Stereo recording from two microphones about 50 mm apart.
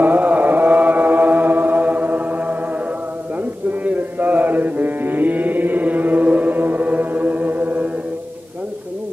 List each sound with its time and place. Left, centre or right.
0.0 s music: right
3.8 s mantra: right